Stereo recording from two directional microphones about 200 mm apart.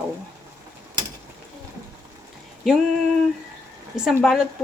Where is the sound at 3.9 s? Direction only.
5° right (ahead or behind).